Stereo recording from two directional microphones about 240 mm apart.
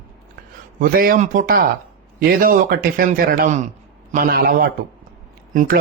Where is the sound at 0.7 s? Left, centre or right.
Right.